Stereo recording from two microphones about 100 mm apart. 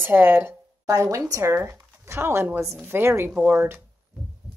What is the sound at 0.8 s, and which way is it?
A woman's voice, 35° right (ahead or behind).